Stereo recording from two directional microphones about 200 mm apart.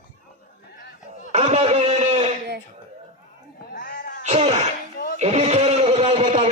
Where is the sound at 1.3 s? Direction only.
35° right (ahead or behind).